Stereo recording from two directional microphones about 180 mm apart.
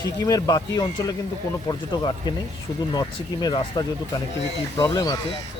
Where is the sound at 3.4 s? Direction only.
25° left (ahead or behind).